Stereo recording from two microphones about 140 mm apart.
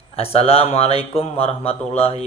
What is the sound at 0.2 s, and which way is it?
Speech, 45° left (ahead or behind).